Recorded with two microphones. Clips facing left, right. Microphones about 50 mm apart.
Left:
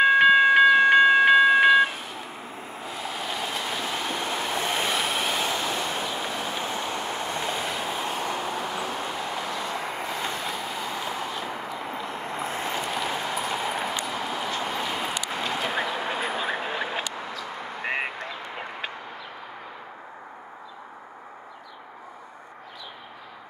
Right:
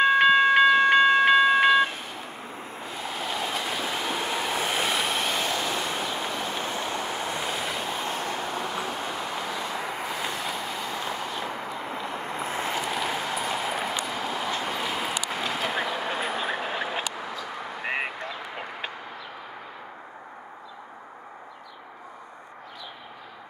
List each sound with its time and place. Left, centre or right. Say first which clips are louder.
0.0 s train: left 2 dB; centre
2.8 s waves: even; centre
17.8 s a sound: left 1 dB; centre